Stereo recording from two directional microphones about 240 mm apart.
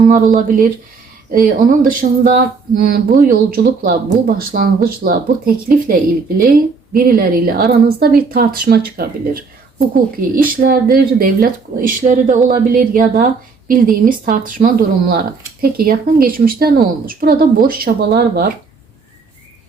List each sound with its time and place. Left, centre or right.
0.1 s speech: right
6.9 s speech: right